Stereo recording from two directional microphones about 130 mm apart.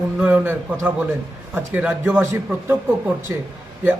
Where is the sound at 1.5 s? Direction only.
15° right (ahead or behind).